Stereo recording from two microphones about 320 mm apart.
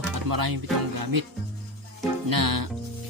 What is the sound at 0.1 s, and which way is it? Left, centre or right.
Speech, right.